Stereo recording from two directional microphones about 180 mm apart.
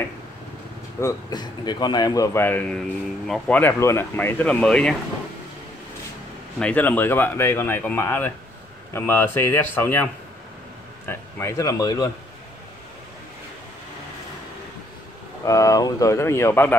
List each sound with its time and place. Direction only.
1.0 s a man's voice: 25° left (ahead or behind); by 4.9 s 5° left (ahead or behind)
6.6 s speech: 10° left (ahead or behind)
11.1 s speech: 15° left (ahead or behind)
15.4 s speech: 20° left (ahead or behind)